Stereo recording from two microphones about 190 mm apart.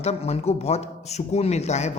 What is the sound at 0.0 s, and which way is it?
Speech, 35° left (ahead or behind).